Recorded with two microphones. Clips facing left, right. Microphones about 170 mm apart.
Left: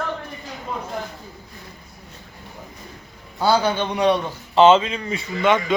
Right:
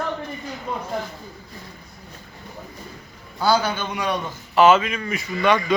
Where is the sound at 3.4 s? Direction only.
25° left (ahead or behind).